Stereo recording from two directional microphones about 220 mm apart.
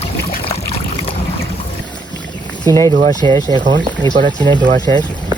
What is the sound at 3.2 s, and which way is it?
Speech, 25° right (ahead or behind).